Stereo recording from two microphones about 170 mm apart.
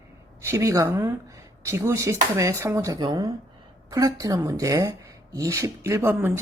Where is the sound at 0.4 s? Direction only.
20° right (ahead or behind).